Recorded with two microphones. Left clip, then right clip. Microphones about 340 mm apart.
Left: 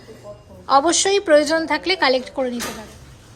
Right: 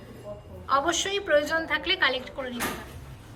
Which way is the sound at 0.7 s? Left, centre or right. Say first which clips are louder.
Left 9 dB; centre.